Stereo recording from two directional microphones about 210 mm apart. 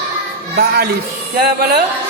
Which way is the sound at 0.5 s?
50° right (ahead or behind).